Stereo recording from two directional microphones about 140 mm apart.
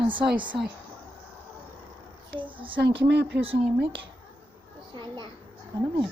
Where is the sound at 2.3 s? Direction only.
35° right (ahead or behind).